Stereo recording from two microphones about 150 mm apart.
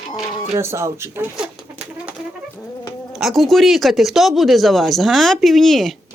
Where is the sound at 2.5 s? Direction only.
20° left (ahead or behind).